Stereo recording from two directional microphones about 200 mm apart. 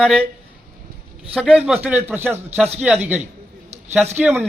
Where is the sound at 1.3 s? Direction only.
5° right (ahead or behind).